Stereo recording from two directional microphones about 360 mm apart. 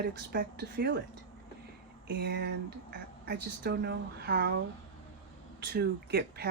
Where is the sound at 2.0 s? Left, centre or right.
Right.